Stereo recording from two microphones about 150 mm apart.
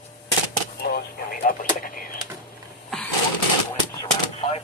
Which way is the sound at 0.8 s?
90° left.